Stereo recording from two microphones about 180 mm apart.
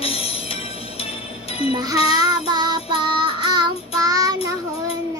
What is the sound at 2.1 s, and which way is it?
Child singing, 20° right (ahead or behind).